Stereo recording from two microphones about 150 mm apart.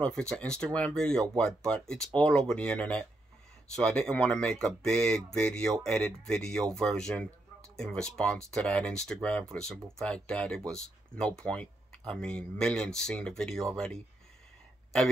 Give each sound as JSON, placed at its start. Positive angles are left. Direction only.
{"t": 0.0, "sound": "speech", "side_deg": 5}